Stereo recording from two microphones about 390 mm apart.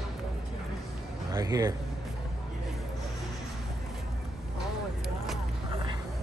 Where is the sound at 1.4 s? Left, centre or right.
Centre.